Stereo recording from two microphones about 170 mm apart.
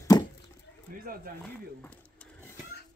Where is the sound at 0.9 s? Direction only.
55° right (ahead or behind).